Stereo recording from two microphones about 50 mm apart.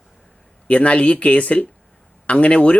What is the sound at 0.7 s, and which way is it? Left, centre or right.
Speech, left.